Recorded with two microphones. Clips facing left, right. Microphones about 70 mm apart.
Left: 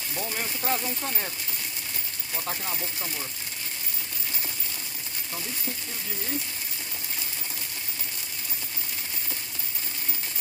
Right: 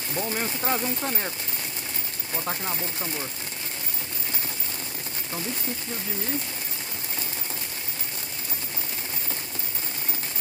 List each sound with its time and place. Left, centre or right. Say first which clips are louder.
0.1 s speech: right 4 dB; centre
2.3 s speech: right 3 dB; centre